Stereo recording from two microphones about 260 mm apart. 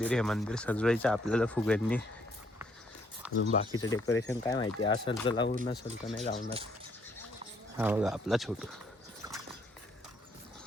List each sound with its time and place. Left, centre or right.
0.0 s speech: centre
3.2 s speech: centre
3.7 s speech: centre
5.7 s speech: centre
6.2 s speech: left
7.8 s speech: centre
9.2 s a sound: centre